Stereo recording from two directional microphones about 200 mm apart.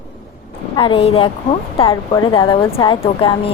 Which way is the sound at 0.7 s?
25° left (ahead or behind).